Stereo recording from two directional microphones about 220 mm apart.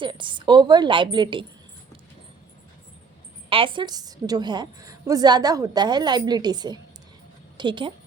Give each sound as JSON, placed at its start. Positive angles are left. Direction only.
{"t": 0.0, "sound": "a woman's voice", "side_deg": -20}
{"t": 3.5, "sound": "a woman's voice", "side_deg": -25}